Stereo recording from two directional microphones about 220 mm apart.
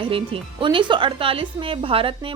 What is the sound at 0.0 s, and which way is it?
Speech, 25° right (ahead or behind).